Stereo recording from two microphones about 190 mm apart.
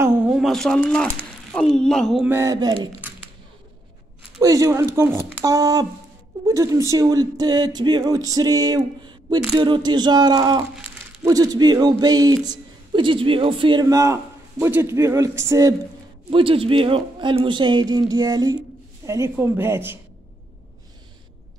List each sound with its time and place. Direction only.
0.0 s speech: 5° right (ahead or behind)
2.2 s a man's voice: 15° right (ahead or behind)
4.4 s a man's voice: 20° right (ahead or behind)
16.3 s a man's voice: 30° right (ahead or behind); by 20.0 s 10° right (ahead or behind)